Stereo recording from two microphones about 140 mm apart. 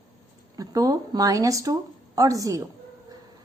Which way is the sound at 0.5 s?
25° right (ahead or behind).